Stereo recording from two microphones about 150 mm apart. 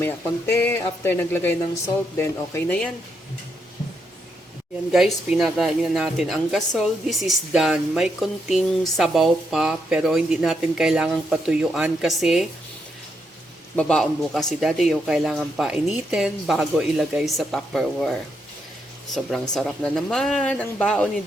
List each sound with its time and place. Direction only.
0.0 s speech: 15° left (ahead or behind)
4.9 s speech: centre (ahead or behind)
13.7 s speech: 5° left (ahead or behind)